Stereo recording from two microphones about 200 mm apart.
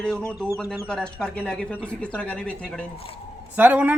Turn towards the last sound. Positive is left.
turn(degrees=-10)  # may be behind; listen again after turning